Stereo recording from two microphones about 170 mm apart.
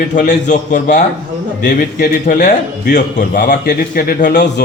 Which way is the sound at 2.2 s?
45° left (ahead or behind).